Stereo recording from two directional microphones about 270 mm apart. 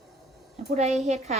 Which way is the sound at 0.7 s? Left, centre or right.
Right.